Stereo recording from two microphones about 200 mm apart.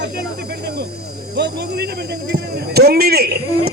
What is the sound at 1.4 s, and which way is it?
A man's voice, 55° right (ahead or behind).